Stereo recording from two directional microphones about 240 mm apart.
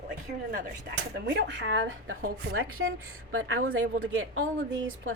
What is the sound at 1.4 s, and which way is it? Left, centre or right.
A woman's voice, right.